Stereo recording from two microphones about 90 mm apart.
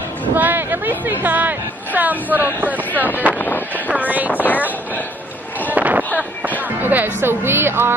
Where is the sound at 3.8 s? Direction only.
20° right (ahead or behind).